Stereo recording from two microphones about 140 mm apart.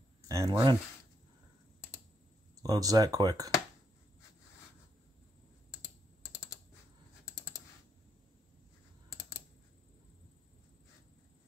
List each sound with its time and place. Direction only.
0.3 s speech: 20° right (ahead or behind)
2.6 s speech: 25° right (ahead or behind)